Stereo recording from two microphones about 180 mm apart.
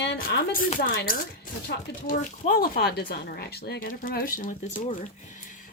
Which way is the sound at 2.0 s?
50° left (ahead or behind).